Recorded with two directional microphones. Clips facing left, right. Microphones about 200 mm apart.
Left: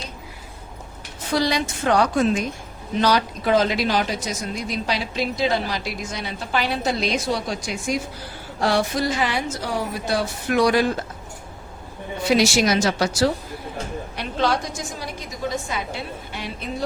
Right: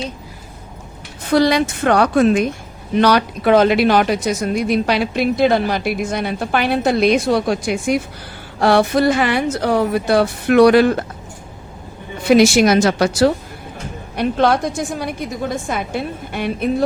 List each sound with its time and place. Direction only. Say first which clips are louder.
1.3 s speech: right 8 dB; 60° right (ahead or behind)
12.2 s speech: right 7 dB; 55° right (ahead or behind)